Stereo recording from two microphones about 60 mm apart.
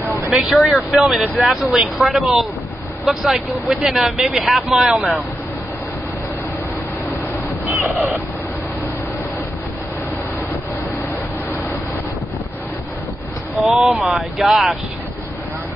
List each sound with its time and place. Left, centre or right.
0.3 s speech: centre
4.8 s speech: centre
7.6 s owl: right
13.7 s speech: centre